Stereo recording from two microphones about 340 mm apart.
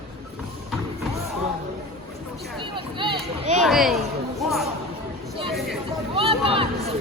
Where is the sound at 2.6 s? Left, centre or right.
Centre.